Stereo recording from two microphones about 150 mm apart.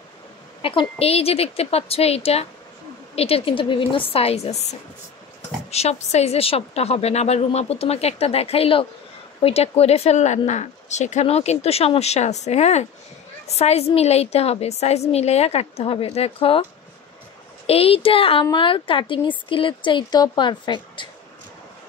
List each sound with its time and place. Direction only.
0.6 s speech: 35° left (ahead or behind)
17.6 s speech: 40° left (ahead or behind)